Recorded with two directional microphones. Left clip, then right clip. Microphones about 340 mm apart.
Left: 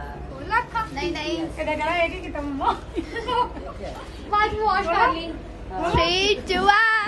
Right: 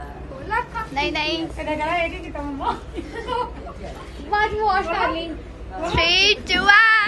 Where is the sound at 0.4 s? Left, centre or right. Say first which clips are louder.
Left 1 dB; centre.